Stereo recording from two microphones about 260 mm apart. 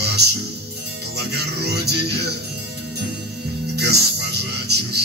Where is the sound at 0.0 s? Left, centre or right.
Right.